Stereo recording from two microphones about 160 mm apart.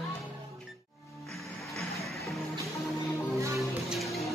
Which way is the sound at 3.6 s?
Centre (ahead or behind).